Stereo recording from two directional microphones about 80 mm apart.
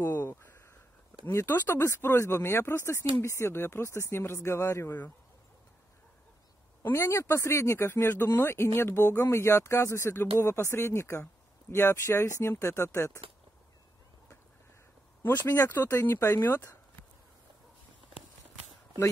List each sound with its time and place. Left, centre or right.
0.0 s a sound: left
1.2 s speech: left
6.8 s speech: left
15.4 s speech: left
15.7 s speech: left